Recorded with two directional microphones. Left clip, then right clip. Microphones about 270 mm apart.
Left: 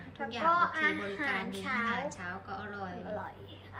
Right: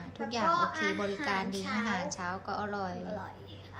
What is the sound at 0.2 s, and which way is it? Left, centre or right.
A woman's voice, centre.